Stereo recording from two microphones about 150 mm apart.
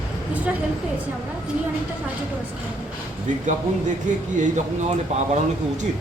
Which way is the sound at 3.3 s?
55° right (ahead or behind).